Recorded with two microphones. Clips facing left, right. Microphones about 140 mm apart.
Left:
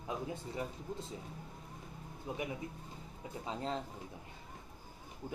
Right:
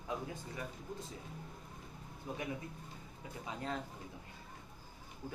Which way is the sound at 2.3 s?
20° left (ahead or behind).